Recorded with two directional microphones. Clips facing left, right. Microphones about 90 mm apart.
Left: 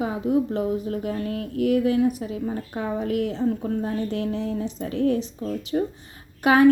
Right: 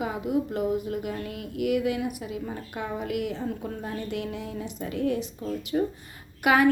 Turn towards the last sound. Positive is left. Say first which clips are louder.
# left 4 dB
turn(degrees=30)  # may be behind; listen again after turning